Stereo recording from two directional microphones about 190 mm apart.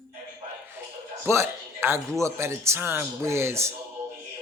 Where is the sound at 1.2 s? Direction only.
15° right (ahead or behind).